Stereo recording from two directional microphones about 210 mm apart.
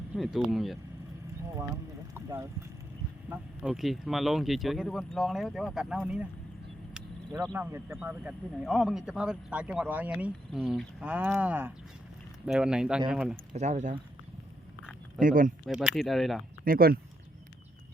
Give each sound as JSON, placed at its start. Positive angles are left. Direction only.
{"t": 0.1, "sound": "speech", "side_deg": 0}
{"t": 2.1, "sound": "boat", "side_deg": -10}
{"t": 3.2, "sound": "speech", "side_deg": -5}
{"t": 13.5, "sound": "speech", "side_deg": -35}
{"t": 15.2, "sound": "speech", "side_deg": -40}
{"t": 15.6, "sound": "speech", "side_deg": -5}
{"t": 16.6, "sound": "speech", "side_deg": -45}